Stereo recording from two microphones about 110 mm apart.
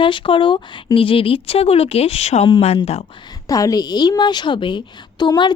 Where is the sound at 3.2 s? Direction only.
35° left (ahead or behind).